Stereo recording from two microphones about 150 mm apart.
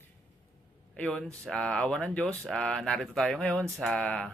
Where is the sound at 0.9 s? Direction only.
5° left (ahead or behind).